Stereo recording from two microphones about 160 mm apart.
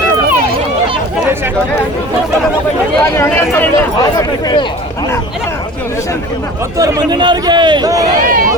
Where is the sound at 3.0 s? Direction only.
15° left (ahead or behind).